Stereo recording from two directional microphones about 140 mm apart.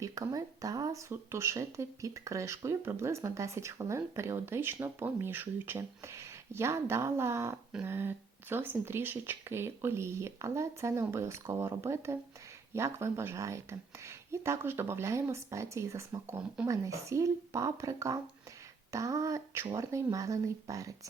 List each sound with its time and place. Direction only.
0.0 s speech: 25° right (ahead or behind)